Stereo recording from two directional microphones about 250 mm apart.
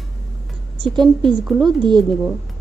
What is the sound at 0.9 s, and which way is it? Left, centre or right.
A woman's voice, centre.